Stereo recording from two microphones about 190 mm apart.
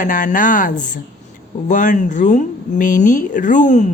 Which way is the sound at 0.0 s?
45° left (ahead or behind).